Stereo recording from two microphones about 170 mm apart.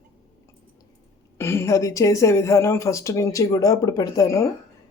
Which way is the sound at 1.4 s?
15° left (ahead or behind).